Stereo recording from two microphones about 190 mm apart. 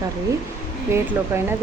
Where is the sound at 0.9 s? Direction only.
15° right (ahead or behind).